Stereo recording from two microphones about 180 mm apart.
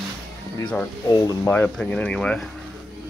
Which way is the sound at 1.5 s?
5° left (ahead or behind).